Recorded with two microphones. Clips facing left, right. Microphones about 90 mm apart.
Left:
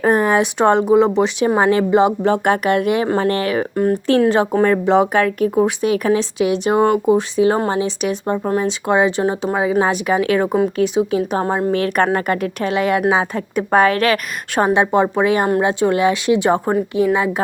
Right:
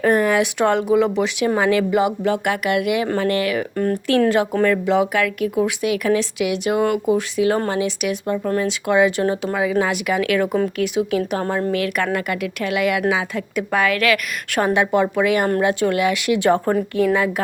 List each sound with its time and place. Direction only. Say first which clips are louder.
0.0 s a woman's voice: left 2 dB; 30° left (ahead or behind)